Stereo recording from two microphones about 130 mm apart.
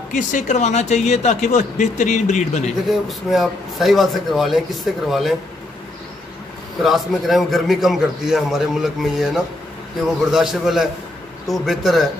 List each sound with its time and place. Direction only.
0.1 s speech: 85° left; by 2.7 s 65° left (ahead or behind)
2.9 s a man's voice: centre (ahead or behind)
6.8 s a man's voice: centre (ahead or behind)